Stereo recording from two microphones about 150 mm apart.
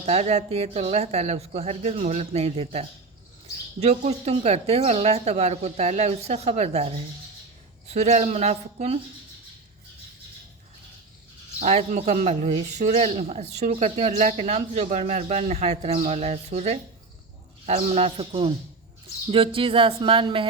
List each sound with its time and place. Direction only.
0.0 s speech: 45° right (ahead or behind)
11.6 s speech: 45° right (ahead or behind)